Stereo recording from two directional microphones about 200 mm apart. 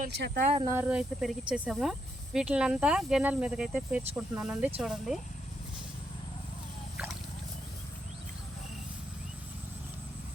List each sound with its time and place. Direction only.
0.1 s speech: 55° right (ahead or behind)
0.7 s speech: 10° right (ahead or behind)